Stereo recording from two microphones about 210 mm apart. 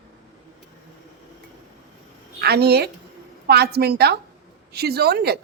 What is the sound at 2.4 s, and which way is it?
A woman's voice, 50° right (ahead or behind).